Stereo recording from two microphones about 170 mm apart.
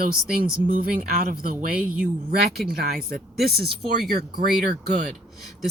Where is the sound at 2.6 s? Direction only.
60° right (ahead or behind).